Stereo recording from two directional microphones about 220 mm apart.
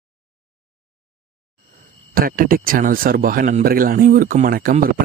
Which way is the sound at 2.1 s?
40° right (ahead or behind).